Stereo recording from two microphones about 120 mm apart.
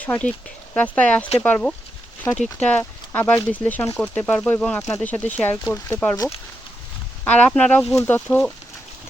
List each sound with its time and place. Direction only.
0.0 s speech: 10° left (ahead or behind)
7.3 s speech: 10° left (ahead or behind)